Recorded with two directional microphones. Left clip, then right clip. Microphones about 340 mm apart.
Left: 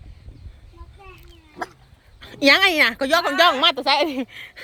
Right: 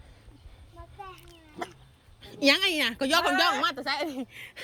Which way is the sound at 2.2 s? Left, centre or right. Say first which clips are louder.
Left 8 dB; centre.